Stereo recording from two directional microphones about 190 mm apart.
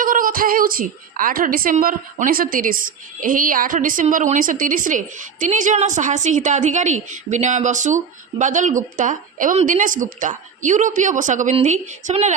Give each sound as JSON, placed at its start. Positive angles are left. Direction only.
{"t": 0.0, "sound": "a woman's voice", "side_deg": -45}